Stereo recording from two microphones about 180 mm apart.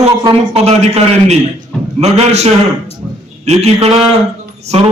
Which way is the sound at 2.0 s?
35° right (ahead or behind).